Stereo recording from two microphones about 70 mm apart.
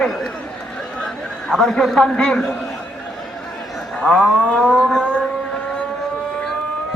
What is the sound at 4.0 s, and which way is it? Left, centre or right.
Speech, centre.